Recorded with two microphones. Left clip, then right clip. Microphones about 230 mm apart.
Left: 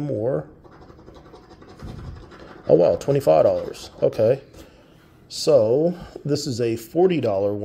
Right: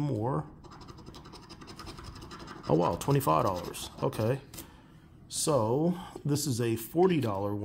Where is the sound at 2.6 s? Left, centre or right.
Centre.